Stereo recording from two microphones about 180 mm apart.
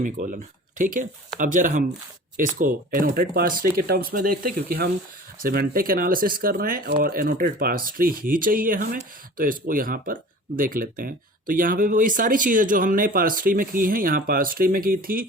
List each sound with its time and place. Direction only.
0.0 s speech: 45° right (ahead or behind)